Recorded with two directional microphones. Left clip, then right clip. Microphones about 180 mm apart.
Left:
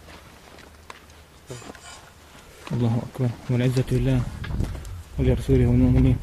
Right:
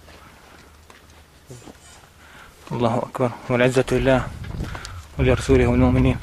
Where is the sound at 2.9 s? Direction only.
20° left (ahead or behind).